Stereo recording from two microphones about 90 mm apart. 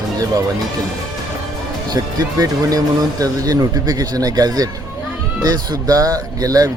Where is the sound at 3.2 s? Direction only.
40° right (ahead or behind).